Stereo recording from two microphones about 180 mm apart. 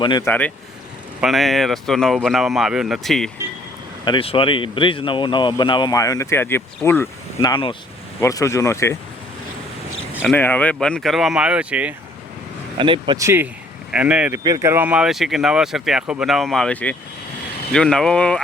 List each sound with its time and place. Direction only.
0.0 s speech: 25° left (ahead or behind)
0.3 s speech: 10° left (ahead or behind)
4.0 s speech: 30° left (ahead or behind); by 7.1 s 15° left (ahead or behind)
7.4 s speech: 25° left (ahead or behind)
10.3 s speech: 10° left (ahead or behind); by 11.9 s 5° right (ahead or behind)
12.8 s a man's voice: 25° right (ahead or behind); by 14.3 s 5° right (ahead or behind)
14.3 s speech: 20° right (ahead or behind); by 18.4 s 5° left (ahead or behind)